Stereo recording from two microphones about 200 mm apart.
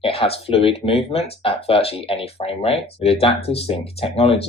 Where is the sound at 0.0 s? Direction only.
30° left (ahead or behind).